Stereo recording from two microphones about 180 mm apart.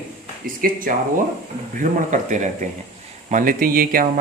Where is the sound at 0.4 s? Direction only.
50° right (ahead or behind).